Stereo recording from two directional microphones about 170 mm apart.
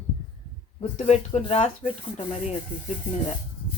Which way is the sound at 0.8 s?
40° left (ahead or behind).